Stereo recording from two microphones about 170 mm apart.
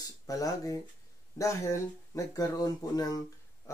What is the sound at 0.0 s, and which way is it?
Speech, 20° left (ahead or behind).